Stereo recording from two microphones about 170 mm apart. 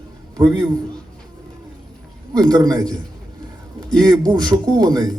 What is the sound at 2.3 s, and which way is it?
A man's voice, 25° right (ahead or behind).